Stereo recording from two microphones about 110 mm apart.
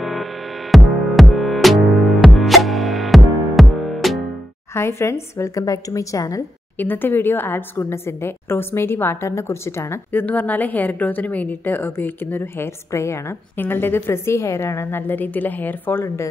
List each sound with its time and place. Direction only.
0.0 s music: centre (ahead or behind)
4.7 s a woman's voice: 25° left (ahead or behind)
6.8 s a woman's voice: 20° left (ahead or behind)